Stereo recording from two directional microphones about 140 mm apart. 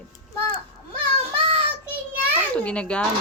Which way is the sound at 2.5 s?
10° left (ahead or behind).